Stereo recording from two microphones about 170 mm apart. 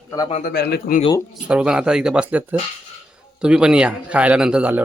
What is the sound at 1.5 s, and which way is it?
A man's voice, 5° right (ahead or behind).